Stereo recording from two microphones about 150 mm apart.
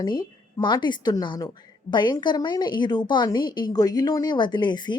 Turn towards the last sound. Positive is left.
turn(degrees=30)  # may be behind; listen again after turning